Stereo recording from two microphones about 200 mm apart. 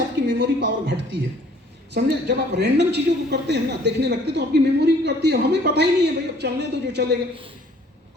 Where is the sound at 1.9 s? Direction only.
55° right (ahead or behind).